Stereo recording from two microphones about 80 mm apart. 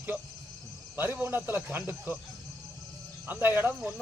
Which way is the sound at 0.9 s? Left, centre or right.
Right.